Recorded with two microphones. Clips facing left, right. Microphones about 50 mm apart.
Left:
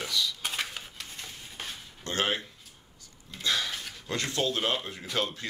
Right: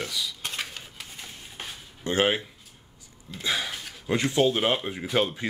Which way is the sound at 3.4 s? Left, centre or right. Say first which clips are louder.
Right 1 dB; centre.